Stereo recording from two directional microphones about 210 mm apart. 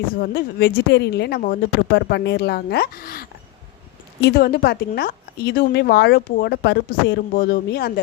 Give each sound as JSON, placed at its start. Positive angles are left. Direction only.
{"t": 0.2, "sound": "speech", "side_deg": 50}